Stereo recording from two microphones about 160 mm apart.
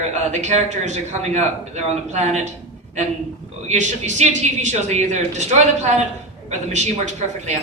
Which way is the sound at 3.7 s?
50° right (ahead or behind).